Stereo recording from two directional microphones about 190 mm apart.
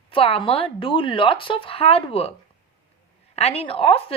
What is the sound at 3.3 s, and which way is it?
Speech, 30° left (ahead or behind).